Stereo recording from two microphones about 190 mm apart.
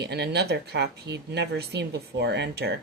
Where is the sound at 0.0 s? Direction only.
60° right (ahead or behind).